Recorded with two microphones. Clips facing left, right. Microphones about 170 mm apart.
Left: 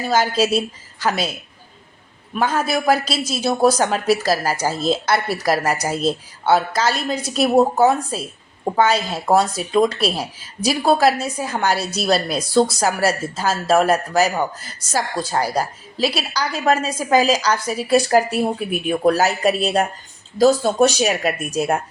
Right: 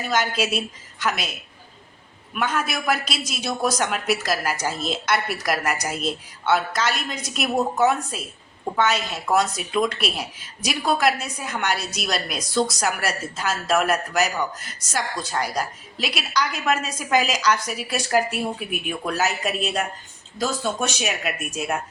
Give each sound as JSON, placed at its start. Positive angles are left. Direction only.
{"t": 0.0, "sound": "speech", "side_deg": 30}
{"t": 2.3, "sound": "speech", "side_deg": 30}